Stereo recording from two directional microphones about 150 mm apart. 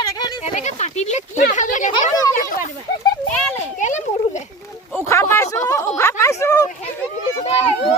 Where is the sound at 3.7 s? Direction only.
55° left (ahead or behind).